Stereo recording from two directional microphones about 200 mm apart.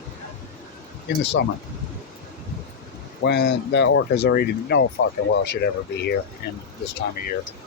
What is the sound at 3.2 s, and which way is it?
Speech, 55° left (ahead or behind).